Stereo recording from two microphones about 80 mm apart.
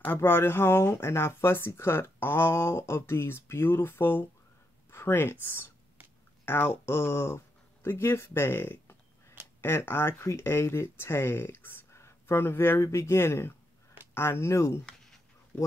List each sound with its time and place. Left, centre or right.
0.0 s speech: left